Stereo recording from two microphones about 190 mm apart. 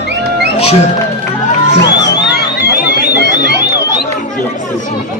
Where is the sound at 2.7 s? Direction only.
55° left (ahead or behind).